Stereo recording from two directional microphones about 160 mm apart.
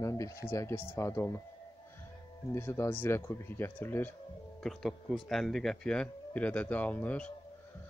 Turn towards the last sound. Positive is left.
turn(degrees=10)  # may be behind; listen again after turning